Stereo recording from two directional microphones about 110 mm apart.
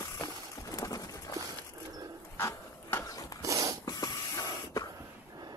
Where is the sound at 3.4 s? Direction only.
30° right (ahead or behind).